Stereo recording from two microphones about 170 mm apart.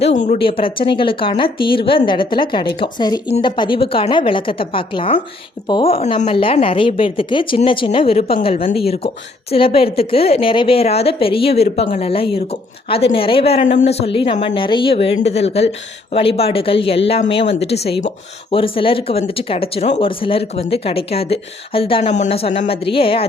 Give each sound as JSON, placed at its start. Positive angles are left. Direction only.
{"t": 0.0, "sound": "speech", "side_deg": 45}
{"t": 0.3, "sound": "speech", "side_deg": 30}